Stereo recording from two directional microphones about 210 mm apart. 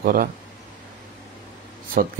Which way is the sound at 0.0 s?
45° right (ahead or behind).